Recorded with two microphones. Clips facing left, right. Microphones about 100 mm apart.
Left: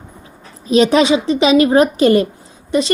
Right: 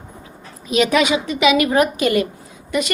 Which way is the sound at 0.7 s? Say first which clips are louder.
Left 5 dB; 30° left (ahead or behind).